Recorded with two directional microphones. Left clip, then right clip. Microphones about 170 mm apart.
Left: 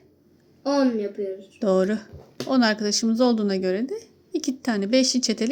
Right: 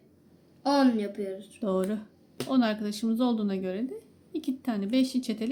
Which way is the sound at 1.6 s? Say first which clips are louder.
Left 9 dB; 25° left (ahead or behind).